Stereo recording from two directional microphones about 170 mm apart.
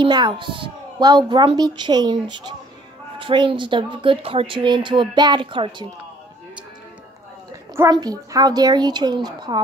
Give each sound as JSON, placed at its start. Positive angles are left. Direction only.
{"t": 0.0, "sound": "speech", "side_deg": -30}
{"t": 7.7, "sound": "speech", "side_deg": -20}